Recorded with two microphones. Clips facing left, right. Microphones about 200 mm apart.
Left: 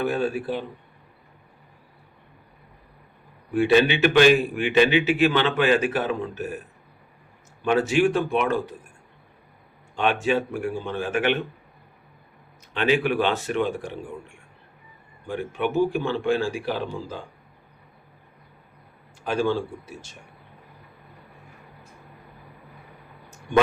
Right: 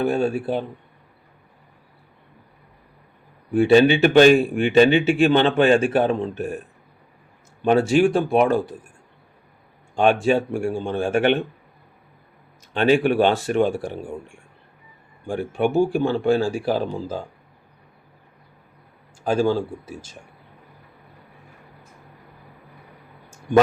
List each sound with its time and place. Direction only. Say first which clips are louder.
0.0 s a man's voice: right 4 dB; 30° right (ahead or behind)
3.8 s a man's voice: right 4 dB; 35° right (ahead or behind)
9.9 s speech: right 6 dB; 45° right (ahead or behind)
10.3 s speech: right 3 dB; 30° right (ahead or behind)
12.7 s speech: right 4 dB; 35° right (ahead or behind)
15.3 s speech: right 4 dB; 45° right (ahead or behind)
19.2 s speech: right 4 dB; 40° right (ahead or behind)